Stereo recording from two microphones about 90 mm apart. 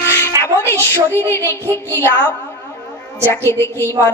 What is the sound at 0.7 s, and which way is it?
A woman's voice, 30° left (ahead or behind).